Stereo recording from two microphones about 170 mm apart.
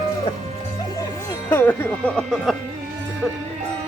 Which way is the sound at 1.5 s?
15° left (ahead or behind).